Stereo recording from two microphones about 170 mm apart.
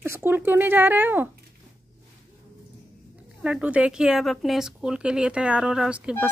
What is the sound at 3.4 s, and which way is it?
Speech, 5° right (ahead or behind).